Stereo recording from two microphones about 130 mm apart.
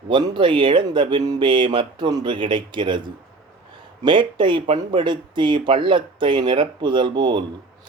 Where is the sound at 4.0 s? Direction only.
40° right (ahead or behind).